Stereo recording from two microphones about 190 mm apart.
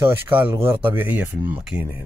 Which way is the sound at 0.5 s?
10° right (ahead or behind).